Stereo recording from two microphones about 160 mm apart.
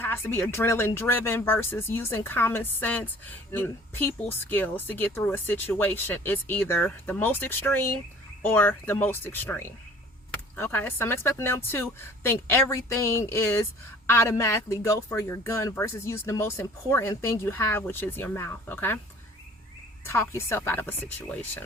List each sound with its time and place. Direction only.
0.0 s speech: 15° left (ahead or behind)
20.1 s speech: 15° left (ahead or behind)